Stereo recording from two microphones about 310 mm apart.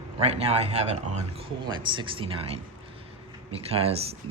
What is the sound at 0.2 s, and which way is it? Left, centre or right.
Speech, centre.